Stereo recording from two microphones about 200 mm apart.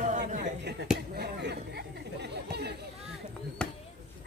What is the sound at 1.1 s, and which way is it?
Chatter, 55° right (ahead or behind).